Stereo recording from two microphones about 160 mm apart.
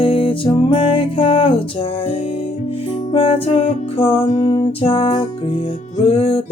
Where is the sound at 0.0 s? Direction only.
35° left (ahead or behind).